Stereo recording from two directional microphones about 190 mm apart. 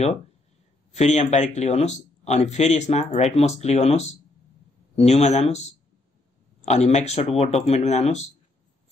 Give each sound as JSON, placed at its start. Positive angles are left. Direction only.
{"t": 0.9, "sound": "speech", "side_deg": 35}
{"t": 6.6, "sound": "speech", "side_deg": 35}